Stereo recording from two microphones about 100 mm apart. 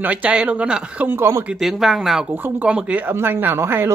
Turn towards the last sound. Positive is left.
turn(degrees=-25)  # may be behind; listen again after turning